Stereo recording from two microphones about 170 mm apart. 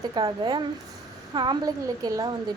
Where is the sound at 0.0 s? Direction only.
25° right (ahead or behind).